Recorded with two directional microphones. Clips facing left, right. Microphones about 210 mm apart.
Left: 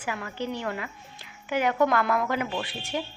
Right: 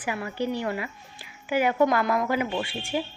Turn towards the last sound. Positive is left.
turn(degrees=-10)  # may be behind; listen again after turning